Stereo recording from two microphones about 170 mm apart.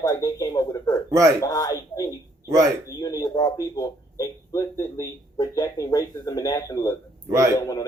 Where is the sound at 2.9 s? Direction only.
20° left (ahead or behind).